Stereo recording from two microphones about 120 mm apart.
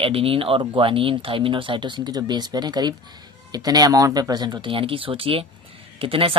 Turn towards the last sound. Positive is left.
turn(degrees=-50)  # may be behind; listen again after turning